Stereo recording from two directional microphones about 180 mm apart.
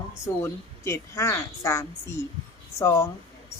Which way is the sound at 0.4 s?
15° left (ahead or behind).